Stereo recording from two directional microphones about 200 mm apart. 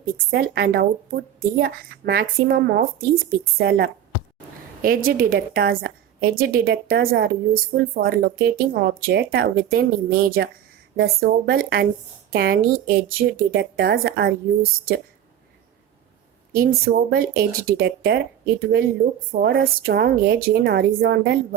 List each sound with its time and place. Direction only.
0.3 s a woman's voice: 55° right (ahead or behind)
16.5 s a woman's voice: 50° right (ahead or behind)